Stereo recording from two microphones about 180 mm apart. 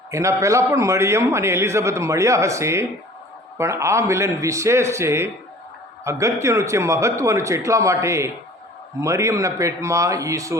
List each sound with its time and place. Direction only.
0.1 s a man's voice: 15° right (ahead or behind)